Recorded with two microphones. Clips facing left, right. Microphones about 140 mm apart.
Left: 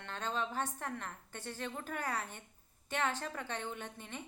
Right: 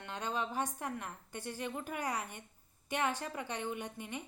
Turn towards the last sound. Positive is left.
turn(degrees=-10)  # may be behind; listen again after turning